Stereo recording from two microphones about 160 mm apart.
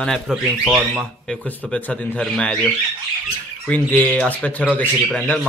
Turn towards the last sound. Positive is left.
turn(degrees=10)  # may be behind; listen again after turning